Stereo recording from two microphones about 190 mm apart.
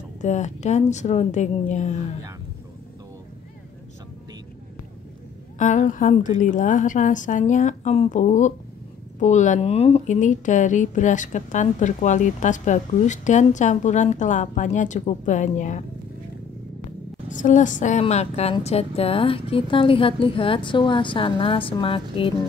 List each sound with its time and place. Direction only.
0.2 s a woman's voice: 35° left (ahead or behind)
5.6 s a woman's voice: 40° left (ahead or behind)
17.3 s a woman's voice: 40° left (ahead or behind)